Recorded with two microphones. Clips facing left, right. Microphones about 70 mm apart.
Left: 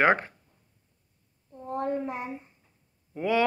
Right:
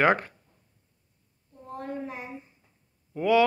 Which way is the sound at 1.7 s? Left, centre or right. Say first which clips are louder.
Left 5 dB; left.